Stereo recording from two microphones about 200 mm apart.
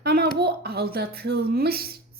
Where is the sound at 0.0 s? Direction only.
55° right (ahead or behind).